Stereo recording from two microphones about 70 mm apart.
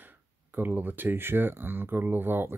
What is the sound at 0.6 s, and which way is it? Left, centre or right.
Speech, right.